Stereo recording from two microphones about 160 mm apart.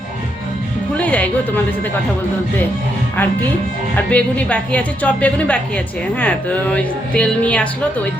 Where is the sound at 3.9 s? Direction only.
10° left (ahead or behind).